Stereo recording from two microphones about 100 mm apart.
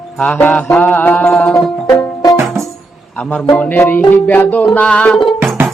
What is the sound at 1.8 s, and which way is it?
Music, 25° left (ahead or behind).